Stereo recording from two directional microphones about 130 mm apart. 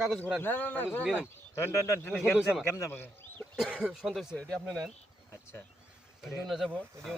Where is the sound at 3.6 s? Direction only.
5° right (ahead or behind).